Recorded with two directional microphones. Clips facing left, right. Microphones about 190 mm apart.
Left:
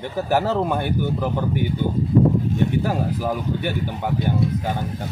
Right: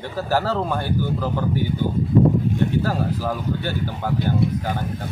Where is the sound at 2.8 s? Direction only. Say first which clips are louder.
Even; 15° left (ahead or behind).